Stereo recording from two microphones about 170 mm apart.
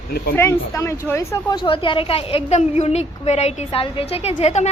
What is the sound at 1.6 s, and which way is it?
A woman's voice, 30° left (ahead or behind).